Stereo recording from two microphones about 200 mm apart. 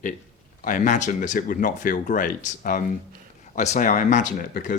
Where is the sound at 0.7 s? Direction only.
40° left (ahead or behind).